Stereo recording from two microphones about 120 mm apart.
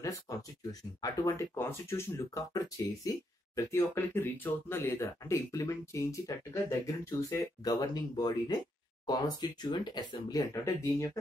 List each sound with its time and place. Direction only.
0.0 s speech: 30° left (ahead or behind)
10.5 s speech: 25° left (ahead or behind)